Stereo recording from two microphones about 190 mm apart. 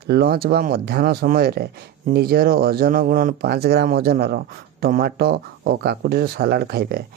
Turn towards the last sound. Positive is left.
turn(degrees=-55)  # may be behind; listen again after turning